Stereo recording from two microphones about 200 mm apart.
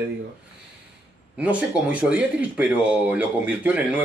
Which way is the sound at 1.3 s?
5° right (ahead or behind).